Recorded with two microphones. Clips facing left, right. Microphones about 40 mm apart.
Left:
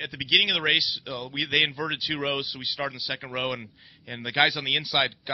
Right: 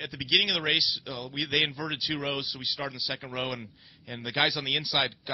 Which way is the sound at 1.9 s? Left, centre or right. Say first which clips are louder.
Left 3 dB; centre.